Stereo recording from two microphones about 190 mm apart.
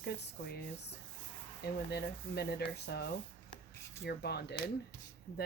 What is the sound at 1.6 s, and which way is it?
Speech, 60° left (ahead or behind).